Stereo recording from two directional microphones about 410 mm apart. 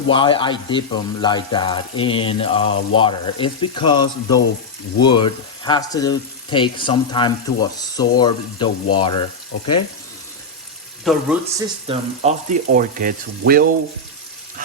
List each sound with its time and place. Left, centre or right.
0.1 s speech: centre
11.0 s speech: centre
11.9 s speech: centre